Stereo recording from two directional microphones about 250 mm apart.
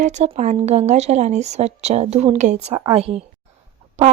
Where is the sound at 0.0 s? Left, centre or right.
Right.